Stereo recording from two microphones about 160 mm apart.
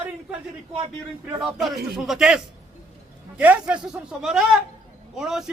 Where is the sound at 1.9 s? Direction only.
Centre (ahead or behind).